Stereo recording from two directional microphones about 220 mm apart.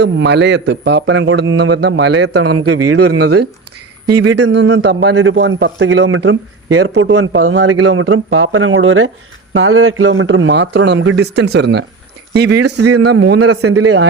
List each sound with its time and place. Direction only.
0.0 s a man's voice: 50° right (ahead or behind)
2.4 s speech: 90° right
4.4 s a man's voice: 55° right (ahead or behind)
12.8 s speech: 90° right